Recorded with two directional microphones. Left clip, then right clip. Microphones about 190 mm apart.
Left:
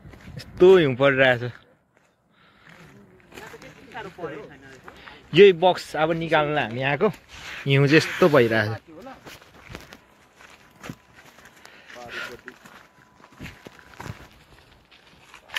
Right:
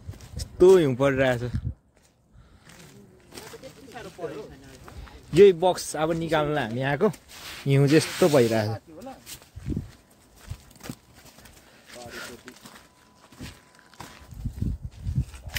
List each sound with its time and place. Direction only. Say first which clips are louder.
0.4 s speech: left 2 dB; 10° right (ahead or behind)
5.0 s a man's voice: left 2 dB; 10° right (ahead or behind)
7.2 s a sound: left 4 dB; 70° right (ahead or behind)
7.6 s a man's voice: left 3 dB; 15° right (ahead or behind)